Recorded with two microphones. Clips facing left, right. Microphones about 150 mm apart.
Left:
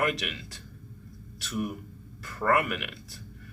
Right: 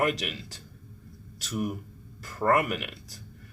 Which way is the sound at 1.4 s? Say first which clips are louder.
Right 1 dB; 40° right (ahead or behind).